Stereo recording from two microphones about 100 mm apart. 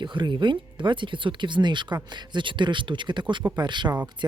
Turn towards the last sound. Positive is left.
turn(degrees=-50)  # may be behind; listen again after turning